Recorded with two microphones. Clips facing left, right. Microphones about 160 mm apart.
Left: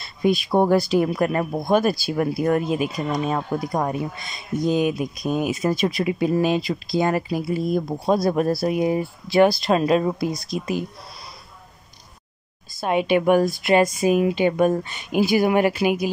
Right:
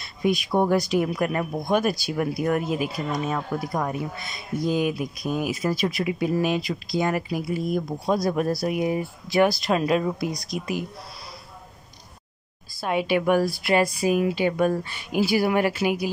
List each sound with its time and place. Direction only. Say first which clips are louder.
0.0 s a sound: left 3 dB; 30° left (ahead or behind)
0.5 s speech: left 4 dB; 40° left (ahead or behind); by 3.2 s 20° left (ahead or behind)
3.5 s speech: left 3 dB; 30° left (ahead or behind)
4.2 s speech: left 3 dB; 20° left (ahead or behind)
12.7 s speech: left 4 dB; 20° left (ahead or behind)